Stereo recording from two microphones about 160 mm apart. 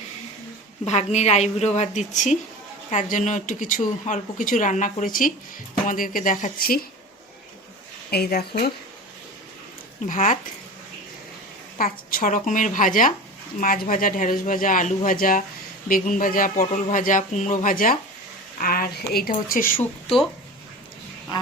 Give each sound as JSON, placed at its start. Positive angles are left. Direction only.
{"t": 0.9, "sound": "a woman's voice", "side_deg": 45}
{"t": 8.1, "sound": "speech", "side_deg": 80}
{"t": 10.1, "sound": "speech", "side_deg": 55}
{"t": 11.8, "sound": "speech", "side_deg": 60}
{"t": 18.6, "sound": "speech", "side_deg": 70}